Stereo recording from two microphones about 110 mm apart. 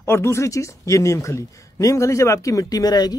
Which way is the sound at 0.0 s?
20° left (ahead or behind).